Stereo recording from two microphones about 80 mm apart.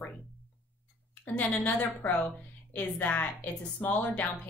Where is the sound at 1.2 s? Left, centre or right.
Centre.